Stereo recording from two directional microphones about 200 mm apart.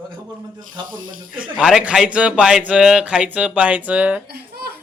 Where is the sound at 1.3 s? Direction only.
5° right (ahead or behind).